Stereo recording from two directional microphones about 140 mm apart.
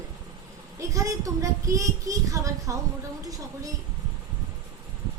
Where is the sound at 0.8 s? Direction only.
20° right (ahead or behind).